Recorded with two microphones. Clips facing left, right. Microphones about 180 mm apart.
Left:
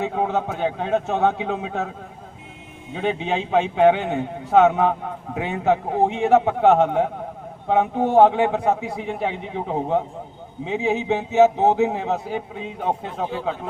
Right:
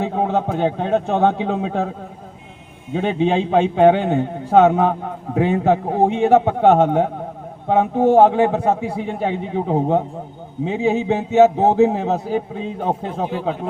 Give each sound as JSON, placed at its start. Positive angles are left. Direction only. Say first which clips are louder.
{"t": 0.0, "sound": "a man's voice", "louder": "right 3 dB", "side_deg": -40}
{"t": 2.9, "sound": "a man's voice", "louder": "right 5 dB", "side_deg": -35}